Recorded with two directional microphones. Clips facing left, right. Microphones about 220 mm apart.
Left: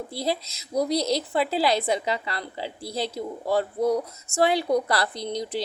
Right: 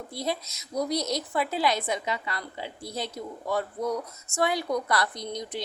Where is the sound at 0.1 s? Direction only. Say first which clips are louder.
Left 2 dB; 30° left (ahead or behind).